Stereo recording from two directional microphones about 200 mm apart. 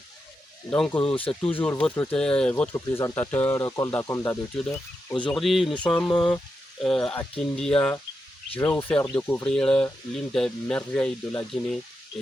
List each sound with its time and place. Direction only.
0.7 s speech: 10° left (ahead or behind)
1.0 s speech: 25° left (ahead or behind)
1.5 s speech: 10° left (ahead or behind)
5.2 s speech: centre (ahead or behind)